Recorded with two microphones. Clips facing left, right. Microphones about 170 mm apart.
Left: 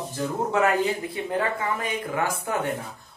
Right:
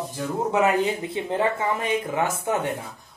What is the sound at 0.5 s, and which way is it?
Speech, 20° right (ahead or behind).